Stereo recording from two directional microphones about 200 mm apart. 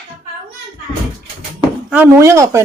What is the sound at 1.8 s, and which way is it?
Speech, 10° right (ahead or behind).